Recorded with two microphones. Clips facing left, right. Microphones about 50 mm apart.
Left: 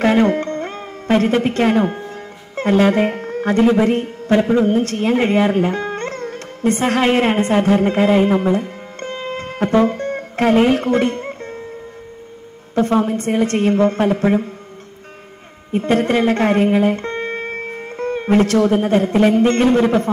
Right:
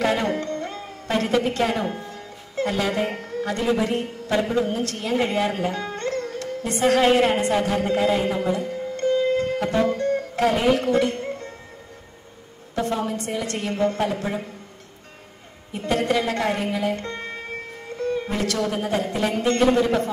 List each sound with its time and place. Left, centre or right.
0.0 s speech: left
12.7 s a woman's voice: left
15.7 s speech: left